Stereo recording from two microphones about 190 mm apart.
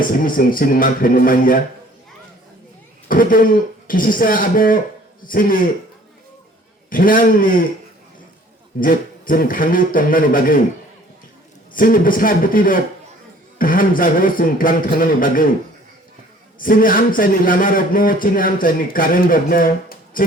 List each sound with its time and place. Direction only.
0.0 s a man's voice: 45° left (ahead or behind)
3.1 s a man's voice: 45° left (ahead or behind)
6.9 s a man's voice: 45° left (ahead or behind)
8.8 s a man's voice: 45° left (ahead or behind)
11.7 s a man's voice: 50° left (ahead or behind)
16.6 s a man's voice: 45° left (ahead or behind)